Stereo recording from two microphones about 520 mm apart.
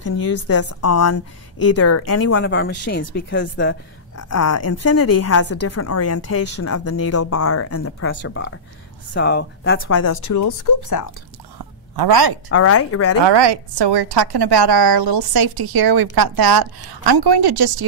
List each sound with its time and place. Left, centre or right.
0.0 s speech: left
0.5 s a woman's voice: left
11.5 s a sound: right
12.4 s a woman's voice: left
13.2 s a woman's voice: right